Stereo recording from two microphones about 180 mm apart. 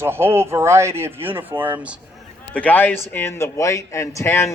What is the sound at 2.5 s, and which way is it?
A man's voice, 10° left (ahead or behind).